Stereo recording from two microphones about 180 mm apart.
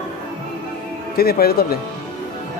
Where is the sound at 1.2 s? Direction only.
60° left (ahead or behind).